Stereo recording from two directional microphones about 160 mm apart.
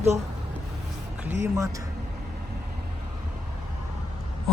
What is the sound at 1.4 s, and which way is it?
Speech, 20° right (ahead or behind).